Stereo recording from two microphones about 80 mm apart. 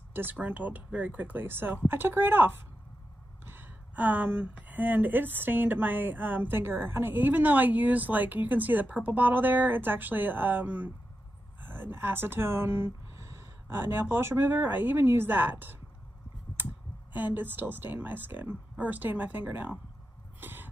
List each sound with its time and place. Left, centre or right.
0.1 s speech: right
17.1 s speech: right
20.3 s a sound: right